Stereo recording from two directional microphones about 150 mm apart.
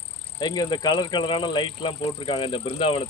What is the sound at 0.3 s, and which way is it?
Speech, 25° left (ahead or behind).